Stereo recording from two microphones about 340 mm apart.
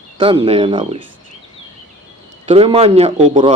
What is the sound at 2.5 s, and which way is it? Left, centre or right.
Speech, centre.